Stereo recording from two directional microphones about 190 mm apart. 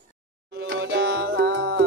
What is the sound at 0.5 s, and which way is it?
Music, 65° right (ahead or behind).